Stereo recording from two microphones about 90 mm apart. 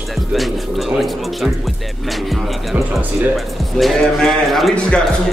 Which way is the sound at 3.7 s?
Centre (ahead or behind).